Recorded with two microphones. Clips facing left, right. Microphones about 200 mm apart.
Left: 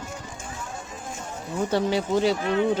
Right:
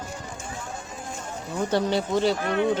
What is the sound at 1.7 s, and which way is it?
Speech, 10° left (ahead or behind).